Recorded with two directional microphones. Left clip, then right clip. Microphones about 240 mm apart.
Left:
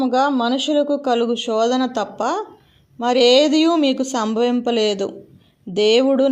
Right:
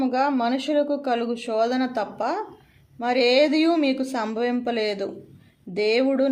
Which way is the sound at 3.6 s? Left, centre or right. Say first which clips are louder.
Left 4 dB; left.